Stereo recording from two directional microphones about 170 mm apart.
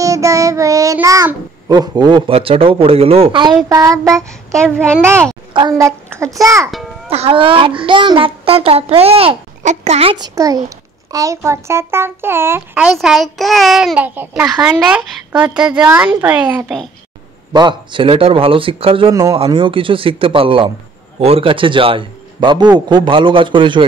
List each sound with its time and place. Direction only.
0.0 s child singing: 20° right (ahead or behind)
0.9 s a child's voice: 15° right (ahead or behind)
4.6 s a child's voice: 5° left (ahead or behind)
5.5 s a child's voice: 25° right (ahead or behind)
7.1 s a child's voice: 35° right (ahead or behind)
10.1 s a child's voice: 20° right (ahead or behind); by 16.9 s centre (ahead or behind)
17.5 s a child's voice: 25° right (ahead or behind)